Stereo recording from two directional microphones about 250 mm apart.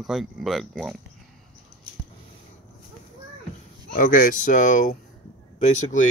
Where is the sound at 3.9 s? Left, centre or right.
Left.